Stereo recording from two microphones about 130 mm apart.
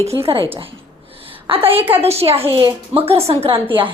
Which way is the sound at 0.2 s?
45° right (ahead or behind).